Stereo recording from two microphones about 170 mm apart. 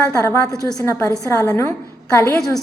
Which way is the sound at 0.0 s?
15° left (ahead or behind).